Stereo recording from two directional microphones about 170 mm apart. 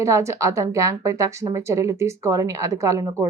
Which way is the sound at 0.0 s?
15° right (ahead or behind).